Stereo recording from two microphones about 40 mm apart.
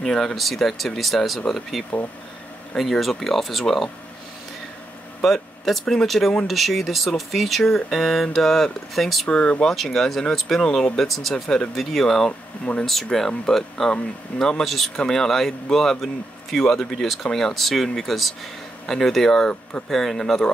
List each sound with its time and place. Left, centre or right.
0.0 s speech: centre
5.2 s speech: centre
9.3 s speech: left
9.7 s speech: centre
12.3 s speech: left
12.8 s speech: centre